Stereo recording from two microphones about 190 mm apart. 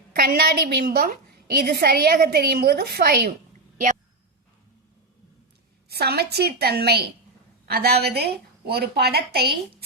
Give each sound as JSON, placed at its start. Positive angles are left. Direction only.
{"t": 0.1, "sound": "a woman's voice", "side_deg": -55}
{"t": 5.9, "sound": "a woman's voice", "side_deg": -55}